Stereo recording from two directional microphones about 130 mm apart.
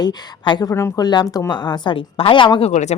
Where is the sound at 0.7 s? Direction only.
20° left (ahead or behind); by 2.7 s 40° left (ahead or behind).